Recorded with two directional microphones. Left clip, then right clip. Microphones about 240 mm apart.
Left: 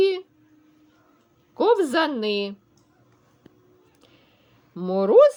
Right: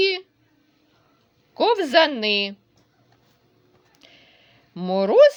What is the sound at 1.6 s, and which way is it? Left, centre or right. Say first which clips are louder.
Speech: right 2 dB; right.